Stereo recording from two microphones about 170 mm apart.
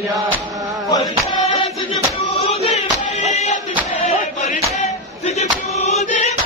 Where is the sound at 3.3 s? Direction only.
40° left (ahead or behind).